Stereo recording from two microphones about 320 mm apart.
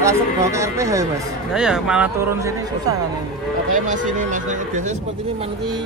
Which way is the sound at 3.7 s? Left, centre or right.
Right.